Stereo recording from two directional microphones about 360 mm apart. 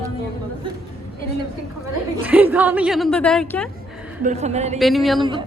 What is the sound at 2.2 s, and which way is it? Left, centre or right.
A woman's voice, centre.